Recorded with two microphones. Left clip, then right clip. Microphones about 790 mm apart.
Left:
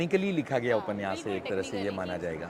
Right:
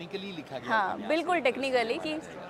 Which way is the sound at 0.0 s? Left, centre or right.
Left.